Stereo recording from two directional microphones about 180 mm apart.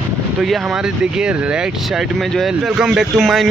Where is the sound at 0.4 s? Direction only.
5° right (ahead or behind).